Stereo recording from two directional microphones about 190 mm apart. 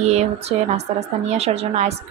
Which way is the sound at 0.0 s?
35° right (ahead or behind).